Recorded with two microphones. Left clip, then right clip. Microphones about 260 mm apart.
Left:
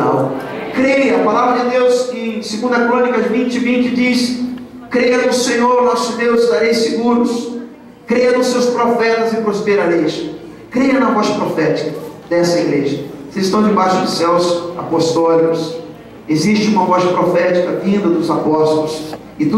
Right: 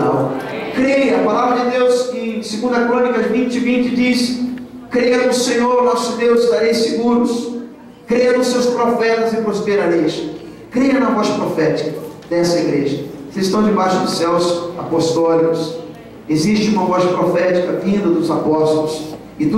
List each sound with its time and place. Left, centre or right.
0.0 s a sound: left
0.5 s a man's voice: centre
13.5 s a man's voice: centre
14.3 s a man's voice: centre
18.0 s a man's voice: centre